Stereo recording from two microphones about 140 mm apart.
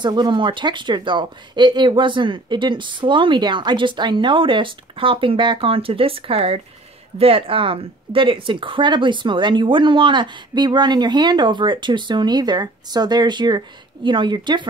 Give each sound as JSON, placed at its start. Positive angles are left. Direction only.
{"t": 0.0, "sound": "speech", "side_deg": -30}